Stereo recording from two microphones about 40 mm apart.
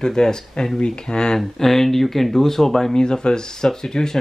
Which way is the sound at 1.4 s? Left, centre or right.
Centre.